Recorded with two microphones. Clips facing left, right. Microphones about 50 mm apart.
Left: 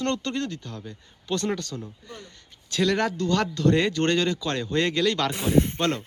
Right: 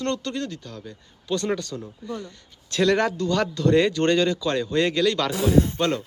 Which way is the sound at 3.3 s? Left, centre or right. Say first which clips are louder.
Right 1 dB; centre.